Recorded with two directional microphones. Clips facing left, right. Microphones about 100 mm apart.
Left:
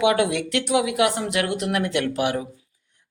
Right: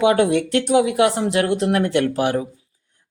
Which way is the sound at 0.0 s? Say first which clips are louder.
Right 4 dB; 35° right (ahead or behind).